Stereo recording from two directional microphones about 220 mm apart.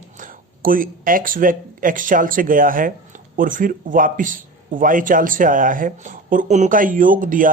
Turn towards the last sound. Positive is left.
turn(degrees=-40)  # may be behind; listen again after turning